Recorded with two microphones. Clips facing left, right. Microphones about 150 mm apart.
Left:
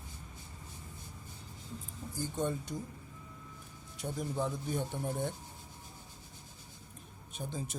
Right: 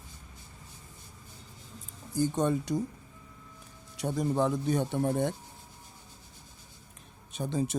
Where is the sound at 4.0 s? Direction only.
80° right.